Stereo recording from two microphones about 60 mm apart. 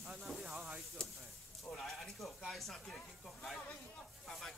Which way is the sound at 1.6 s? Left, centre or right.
Centre.